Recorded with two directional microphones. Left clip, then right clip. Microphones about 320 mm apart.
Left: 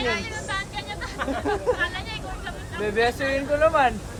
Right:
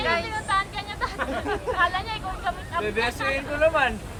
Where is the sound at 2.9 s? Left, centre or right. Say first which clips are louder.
Left 4 dB; left.